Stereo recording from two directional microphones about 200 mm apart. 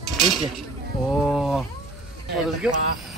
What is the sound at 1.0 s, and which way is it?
Speech, 5° left (ahead or behind).